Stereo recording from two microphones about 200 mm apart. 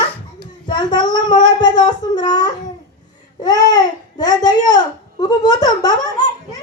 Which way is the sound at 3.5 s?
20° left (ahead or behind).